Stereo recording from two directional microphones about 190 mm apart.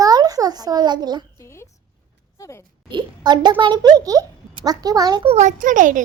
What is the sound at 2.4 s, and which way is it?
Speech, 15° left (ahead or behind).